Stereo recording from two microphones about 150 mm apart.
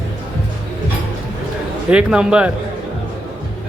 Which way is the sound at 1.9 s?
5° right (ahead or behind).